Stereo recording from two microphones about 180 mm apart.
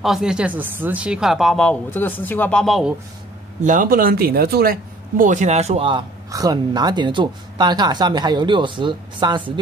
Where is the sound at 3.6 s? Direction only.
50° right (ahead or behind).